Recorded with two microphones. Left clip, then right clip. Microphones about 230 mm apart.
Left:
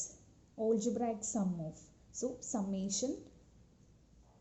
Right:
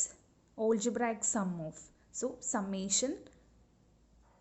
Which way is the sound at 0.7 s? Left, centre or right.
Centre.